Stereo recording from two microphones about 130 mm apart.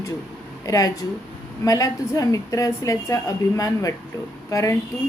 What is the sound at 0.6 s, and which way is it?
A woman's voice, 25° left (ahead or behind).